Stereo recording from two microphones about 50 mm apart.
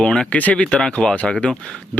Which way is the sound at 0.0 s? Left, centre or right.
Centre.